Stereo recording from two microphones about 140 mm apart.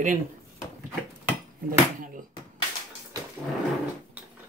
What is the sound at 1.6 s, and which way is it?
Speech, 80° right.